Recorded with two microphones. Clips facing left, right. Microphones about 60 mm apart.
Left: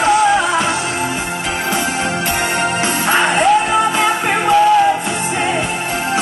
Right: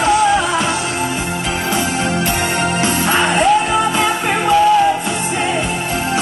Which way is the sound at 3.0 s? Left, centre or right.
Left.